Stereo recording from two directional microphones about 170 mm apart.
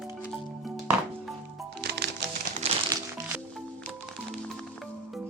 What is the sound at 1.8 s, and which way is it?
Music, 70° right (ahead or behind).